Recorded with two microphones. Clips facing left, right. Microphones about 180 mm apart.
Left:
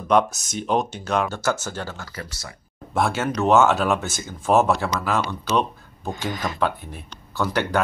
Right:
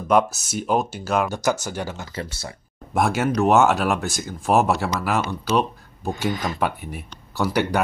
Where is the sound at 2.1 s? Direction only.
30° right (ahead or behind).